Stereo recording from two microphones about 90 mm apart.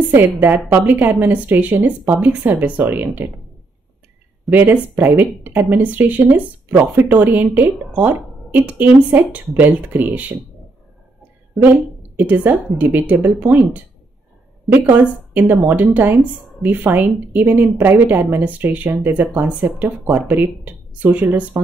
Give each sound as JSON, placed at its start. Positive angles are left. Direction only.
{"t": 0.0, "sound": "a woman's voice", "side_deg": -20}
{"t": 4.5, "sound": "speech", "side_deg": -20}
{"t": 11.6, "sound": "speech", "side_deg": -20}
{"t": 14.7, "sound": "speech", "side_deg": -20}